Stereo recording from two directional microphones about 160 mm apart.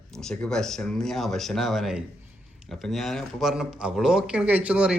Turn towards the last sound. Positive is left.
turn(degrees=-5)  # may be behind; listen again after turning